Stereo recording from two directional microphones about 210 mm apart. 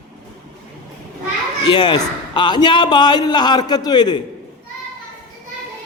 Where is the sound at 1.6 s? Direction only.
20° left (ahead or behind).